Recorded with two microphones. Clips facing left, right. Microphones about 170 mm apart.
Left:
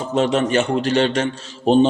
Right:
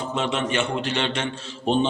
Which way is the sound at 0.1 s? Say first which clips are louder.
Left 9 dB; 40° left (ahead or behind).